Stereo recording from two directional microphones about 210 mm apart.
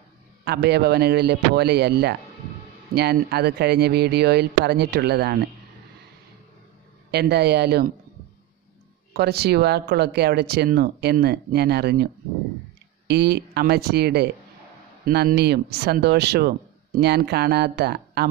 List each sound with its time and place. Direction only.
0.5 s speech: 50° right (ahead or behind)
7.1 s speech: 50° right (ahead or behind)
9.1 s speech: 50° right (ahead or behind)